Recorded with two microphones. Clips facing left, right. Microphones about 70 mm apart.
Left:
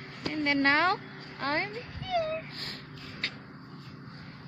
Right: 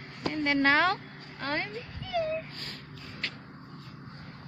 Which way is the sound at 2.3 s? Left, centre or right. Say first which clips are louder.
Right 1 dB; left.